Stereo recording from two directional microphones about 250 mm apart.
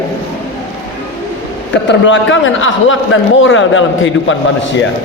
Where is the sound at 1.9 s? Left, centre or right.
Left.